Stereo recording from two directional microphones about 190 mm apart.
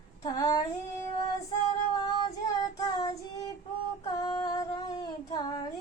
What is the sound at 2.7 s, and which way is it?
Child singing, 20° left (ahead or behind).